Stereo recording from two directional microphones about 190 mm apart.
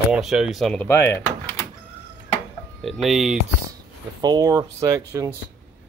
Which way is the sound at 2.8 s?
Centre (ahead or behind).